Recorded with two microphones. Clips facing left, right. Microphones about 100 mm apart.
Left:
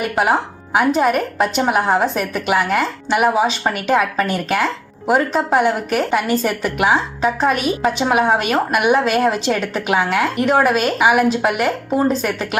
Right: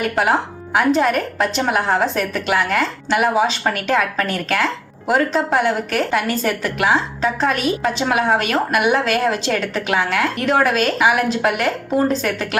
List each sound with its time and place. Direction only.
0.2 s speech: 15° left (ahead or behind)